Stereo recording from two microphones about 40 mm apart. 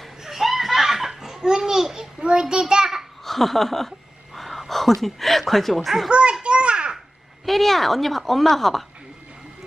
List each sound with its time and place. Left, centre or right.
0.2 s belly laugh: centre
3.3 s a sound: centre
4.4 s speech: centre
6.0 s a child's voice: right
6.4 s a sound: right
7.4 s a woman's voice: centre